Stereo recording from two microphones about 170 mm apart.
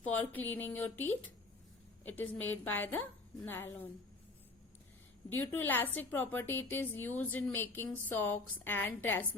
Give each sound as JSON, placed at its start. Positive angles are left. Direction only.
{"t": 0.0, "sound": "a sound", "side_deg": 10}
{"t": 0.5, "sound": "a woman's voice", "side_deg": 10}
{"t": 5.4, "sound": "a woman's voice", "side_deg": 10}